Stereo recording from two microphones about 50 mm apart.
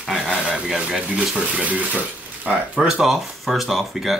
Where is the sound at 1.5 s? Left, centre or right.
Right.